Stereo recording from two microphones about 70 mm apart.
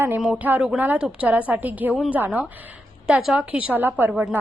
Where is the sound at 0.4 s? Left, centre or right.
Right.